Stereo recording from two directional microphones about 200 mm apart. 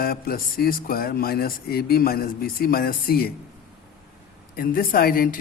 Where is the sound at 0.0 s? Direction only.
50° left (ahead or behind).